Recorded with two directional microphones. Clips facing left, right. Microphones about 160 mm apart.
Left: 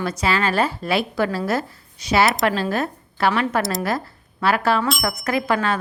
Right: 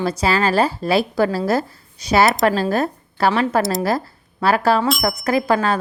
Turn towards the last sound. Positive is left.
turn(degrees=-35)  # may be behind; listen again after turning